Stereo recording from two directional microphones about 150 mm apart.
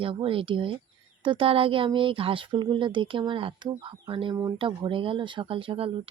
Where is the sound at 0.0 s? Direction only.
35° right (ahead or behind).